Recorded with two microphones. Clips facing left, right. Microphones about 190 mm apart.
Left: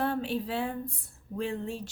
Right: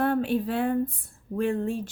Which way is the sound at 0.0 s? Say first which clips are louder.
Right 6 dB; 55° right (ahead or behind).